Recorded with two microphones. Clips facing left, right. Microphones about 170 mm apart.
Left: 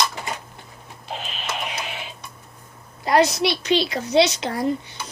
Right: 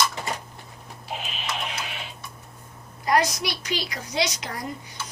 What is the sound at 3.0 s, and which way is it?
A woman's voice, 25° left (ahead or behind).